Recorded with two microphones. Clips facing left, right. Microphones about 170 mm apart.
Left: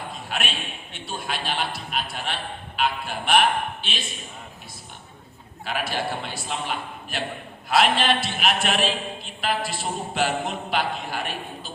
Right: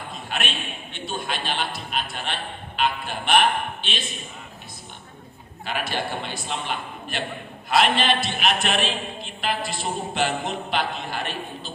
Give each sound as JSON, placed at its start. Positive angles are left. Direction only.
{"t": 0.3, "sound": "a man's voice", "side_deg": 5}
{"t": 5.6, "sound": "a sound", "side_deg": 5}
{"t": 10.2, "sound": "a man's voice", "side_deg": 5}